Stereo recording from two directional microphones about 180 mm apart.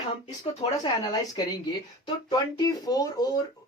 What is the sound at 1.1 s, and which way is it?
Speech, 20° left (ahead or behind).